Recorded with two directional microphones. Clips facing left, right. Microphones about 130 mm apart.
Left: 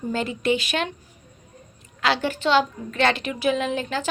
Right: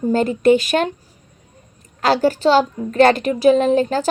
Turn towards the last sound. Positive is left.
turn(degrees=-40)  # may be behind; listen again after turning